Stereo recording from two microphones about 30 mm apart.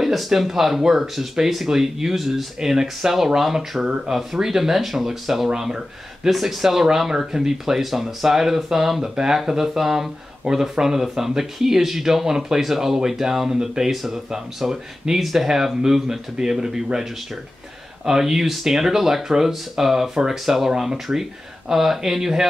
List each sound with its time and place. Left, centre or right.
0.0 s speech: centre
18.0 s speech: centre